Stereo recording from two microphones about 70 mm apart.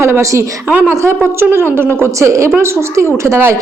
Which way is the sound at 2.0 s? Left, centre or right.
Right.